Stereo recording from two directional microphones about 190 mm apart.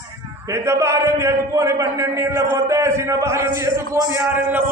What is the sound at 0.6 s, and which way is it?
A man's voice, 15° right (ahead or behind).